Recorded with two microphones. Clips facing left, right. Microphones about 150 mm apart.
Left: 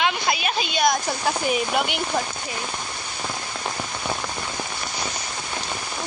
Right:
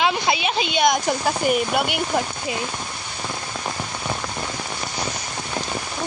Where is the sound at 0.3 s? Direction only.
90° right.